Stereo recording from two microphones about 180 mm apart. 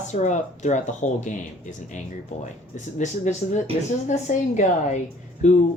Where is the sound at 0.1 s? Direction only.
40° left (ahead or behind).